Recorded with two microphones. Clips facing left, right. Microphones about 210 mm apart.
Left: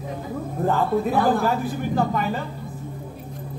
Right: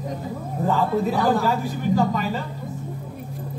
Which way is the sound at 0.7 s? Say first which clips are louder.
Even; 55° left (ahead or behind).